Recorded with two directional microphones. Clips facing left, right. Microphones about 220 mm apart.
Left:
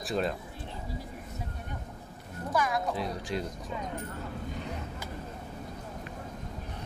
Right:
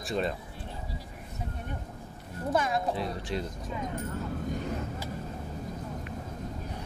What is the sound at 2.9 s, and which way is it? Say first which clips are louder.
Speech: right 1 dB; centre (ahead or behind).